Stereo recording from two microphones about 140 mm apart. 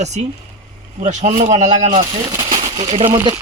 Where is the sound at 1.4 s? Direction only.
55° right (ahead or behind).